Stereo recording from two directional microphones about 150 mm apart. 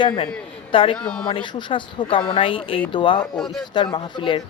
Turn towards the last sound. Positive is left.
turn(degrees=35)  # may be behind; listen again after turning